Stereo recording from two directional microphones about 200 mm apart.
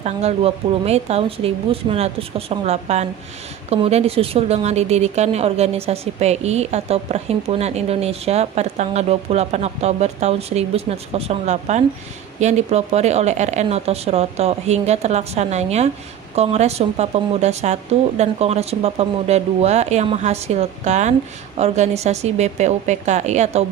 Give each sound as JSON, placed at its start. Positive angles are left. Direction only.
{"t": 0.0, "sound": "a woman's voice", "side_deg": -30}